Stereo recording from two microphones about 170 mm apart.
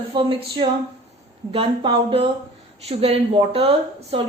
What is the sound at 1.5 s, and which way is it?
Speech, 35° right (ahead or behind).